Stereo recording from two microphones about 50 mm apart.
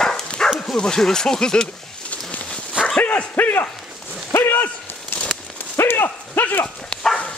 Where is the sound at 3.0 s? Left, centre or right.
Left.